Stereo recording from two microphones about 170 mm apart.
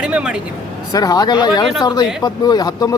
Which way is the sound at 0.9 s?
20° left (ahead or behind).